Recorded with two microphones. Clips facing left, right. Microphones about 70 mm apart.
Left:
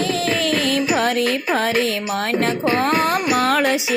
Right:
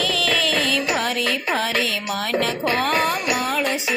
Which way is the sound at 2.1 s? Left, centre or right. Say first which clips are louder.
Left 2 dB; left.